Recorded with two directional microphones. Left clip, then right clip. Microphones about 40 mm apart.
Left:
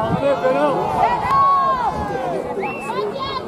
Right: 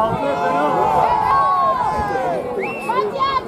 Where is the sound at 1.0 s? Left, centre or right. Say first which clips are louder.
Right 1 dB; left.